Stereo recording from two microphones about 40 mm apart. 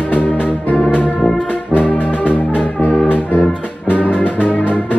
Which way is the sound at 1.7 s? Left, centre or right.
Left.